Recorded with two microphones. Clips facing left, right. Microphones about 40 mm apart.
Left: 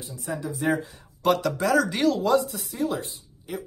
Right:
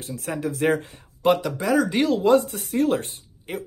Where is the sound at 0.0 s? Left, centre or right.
Right.